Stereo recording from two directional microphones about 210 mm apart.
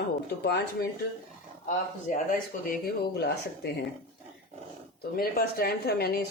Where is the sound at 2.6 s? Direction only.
50° left (ahead or behind).